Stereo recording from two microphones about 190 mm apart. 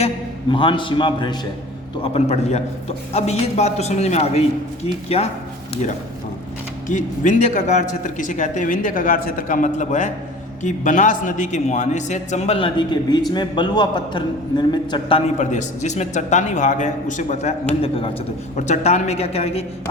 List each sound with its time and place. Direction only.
0.5 s a man's voice: 25° left (ahead or behind)
6.8 s a man's voice: 40° left (ahead or behind); by 15.2 s 25° left (ahead or behind)
15.4 s a man's voice: 40° left (ahead or behind)